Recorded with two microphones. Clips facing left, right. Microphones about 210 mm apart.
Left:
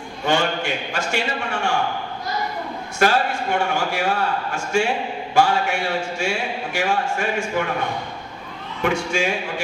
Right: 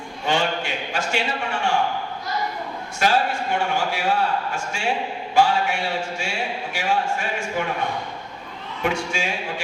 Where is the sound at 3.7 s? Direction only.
45° left (ahead or behind).